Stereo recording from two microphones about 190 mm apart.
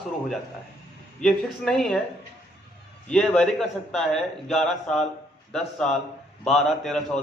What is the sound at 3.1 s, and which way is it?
A man's voice, 5° left (ahead or behind).